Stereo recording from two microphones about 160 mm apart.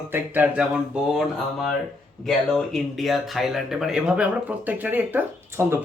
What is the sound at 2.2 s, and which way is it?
Speech, centre (ahead or behind).